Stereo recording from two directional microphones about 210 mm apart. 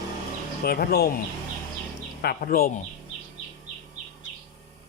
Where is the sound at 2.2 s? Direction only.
45° left (ahead or behind).